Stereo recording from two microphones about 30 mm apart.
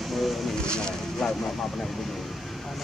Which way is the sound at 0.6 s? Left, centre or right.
Left.